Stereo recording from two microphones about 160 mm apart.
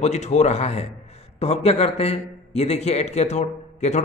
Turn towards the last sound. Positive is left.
turn(degrees=45)  # may be behind; listen again after turning